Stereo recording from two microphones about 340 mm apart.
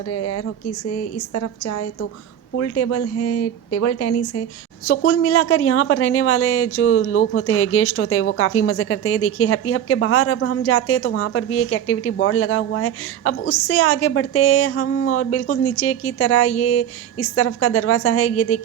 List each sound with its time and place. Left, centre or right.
0.1 s a woman's voice: left